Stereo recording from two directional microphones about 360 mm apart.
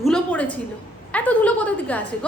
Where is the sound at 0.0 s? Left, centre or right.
Centre.